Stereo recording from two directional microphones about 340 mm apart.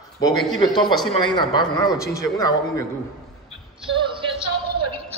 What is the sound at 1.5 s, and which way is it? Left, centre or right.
A man's voice, centre.